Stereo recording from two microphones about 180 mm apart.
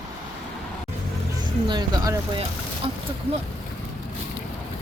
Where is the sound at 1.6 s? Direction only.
25° right (ahead or behind).